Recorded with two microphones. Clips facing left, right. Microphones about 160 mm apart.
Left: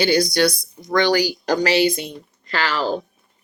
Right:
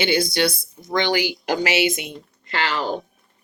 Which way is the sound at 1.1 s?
40° left (ahead or behind).